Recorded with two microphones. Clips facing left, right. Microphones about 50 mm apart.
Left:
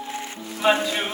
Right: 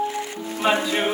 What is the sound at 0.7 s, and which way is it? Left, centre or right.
Music, right.